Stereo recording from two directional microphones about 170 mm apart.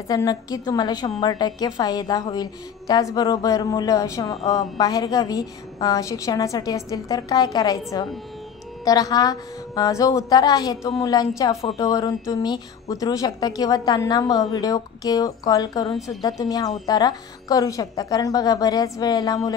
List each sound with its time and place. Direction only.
0.1 s a woman's voice: 20° left (ahead or behind)